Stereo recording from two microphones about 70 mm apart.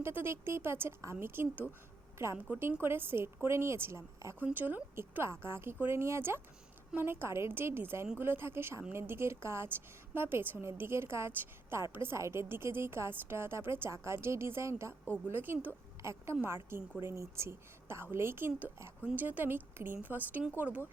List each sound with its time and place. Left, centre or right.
0.0 s a woman's voice: right
4.5 s a woman's voice: right
15.3 s a woman's voice: right
16.0 s a woman's voice: right